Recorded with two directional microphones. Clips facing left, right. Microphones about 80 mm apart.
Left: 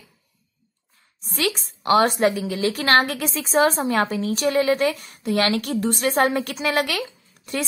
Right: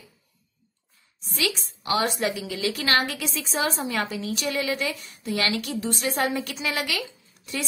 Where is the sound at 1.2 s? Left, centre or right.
Left.